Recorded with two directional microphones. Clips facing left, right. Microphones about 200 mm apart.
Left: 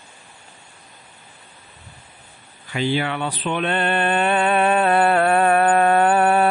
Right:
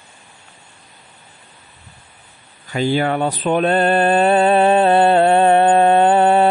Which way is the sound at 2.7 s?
45° right (ahead or behind).